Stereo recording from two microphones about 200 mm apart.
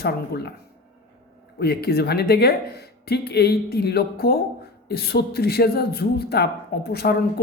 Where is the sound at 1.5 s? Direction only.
55° left (ahead or behind).